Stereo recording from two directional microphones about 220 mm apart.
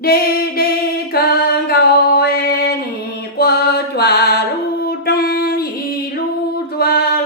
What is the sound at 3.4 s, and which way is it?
Music, 45° left (ahead or behind).